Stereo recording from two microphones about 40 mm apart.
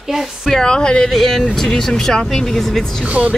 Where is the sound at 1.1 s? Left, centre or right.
Centre.